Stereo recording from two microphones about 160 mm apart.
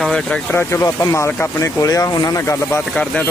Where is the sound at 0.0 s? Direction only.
5° left (ahead or behind).